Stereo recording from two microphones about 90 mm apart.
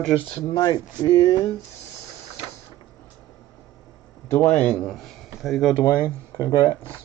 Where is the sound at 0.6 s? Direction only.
50° left (ahead or behind).